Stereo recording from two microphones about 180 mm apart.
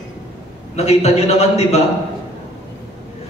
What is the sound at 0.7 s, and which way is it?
Speech, 35° left (ahead or behind).